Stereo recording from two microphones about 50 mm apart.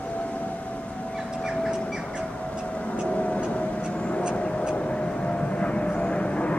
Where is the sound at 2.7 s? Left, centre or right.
Left.